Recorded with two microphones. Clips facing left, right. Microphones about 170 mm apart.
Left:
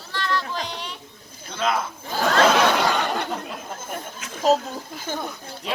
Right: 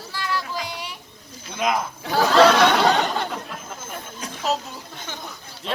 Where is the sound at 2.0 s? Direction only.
80° right.